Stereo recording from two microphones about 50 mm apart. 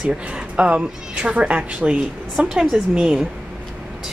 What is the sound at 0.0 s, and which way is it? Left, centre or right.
Speech, centre.